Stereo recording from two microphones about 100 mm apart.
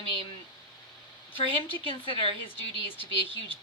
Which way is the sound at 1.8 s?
65° left (ahead or behind).